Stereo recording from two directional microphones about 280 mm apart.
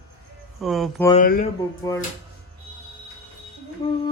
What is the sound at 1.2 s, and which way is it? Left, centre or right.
Speech, left.